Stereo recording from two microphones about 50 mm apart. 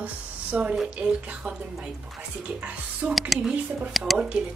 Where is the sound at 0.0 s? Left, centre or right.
Right.